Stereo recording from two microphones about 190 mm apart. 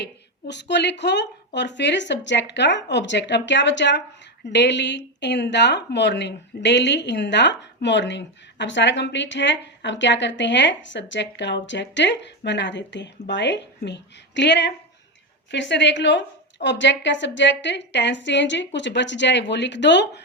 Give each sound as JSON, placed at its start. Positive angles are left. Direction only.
{"t": 0.0, "sound": "a woman's voice", "side_deg": 65}